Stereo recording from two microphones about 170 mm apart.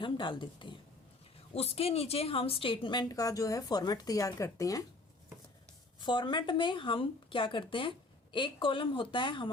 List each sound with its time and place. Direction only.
0.0 s speech: 30° left (ahead or behind)
6.0 s speech: 25° left (ahead or behind)